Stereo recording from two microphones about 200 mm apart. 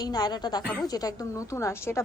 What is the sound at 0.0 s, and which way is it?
A woman's voice, 20° left (ahead or behind).